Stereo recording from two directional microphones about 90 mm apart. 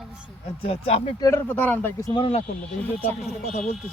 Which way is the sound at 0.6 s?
90° left.